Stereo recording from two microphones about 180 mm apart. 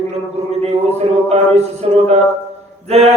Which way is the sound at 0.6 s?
35° right (ahead or behind).